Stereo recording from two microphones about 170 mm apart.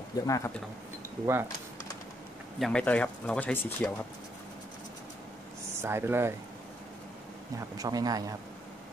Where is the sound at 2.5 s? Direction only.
5° left (ahead or behind).